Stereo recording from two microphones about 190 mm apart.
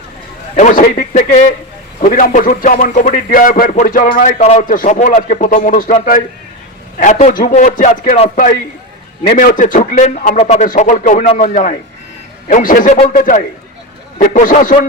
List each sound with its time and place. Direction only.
0.5 s a man's voice: 45° left (ahead or behind)